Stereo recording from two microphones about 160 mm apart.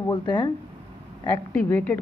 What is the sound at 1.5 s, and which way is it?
Speech, 10° left (ahead or behind).